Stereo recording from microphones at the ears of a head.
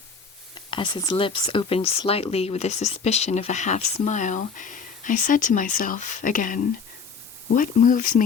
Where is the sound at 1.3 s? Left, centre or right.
Left.